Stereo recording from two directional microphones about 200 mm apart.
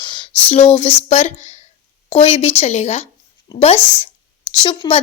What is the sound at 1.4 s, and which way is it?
A woman's voice, 35° left (ahead or behind).